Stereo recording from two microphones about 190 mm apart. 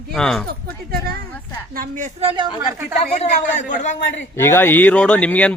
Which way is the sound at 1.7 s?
45° right (ahead or behind).